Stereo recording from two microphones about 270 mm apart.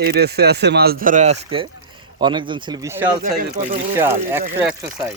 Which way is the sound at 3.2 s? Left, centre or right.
Right.